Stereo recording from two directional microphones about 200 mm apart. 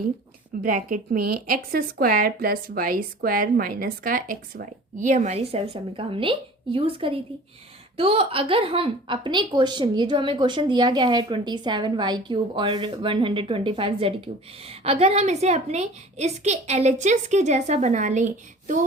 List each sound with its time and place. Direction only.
0.6 s a woman's voice: 40° right (ahead or behind)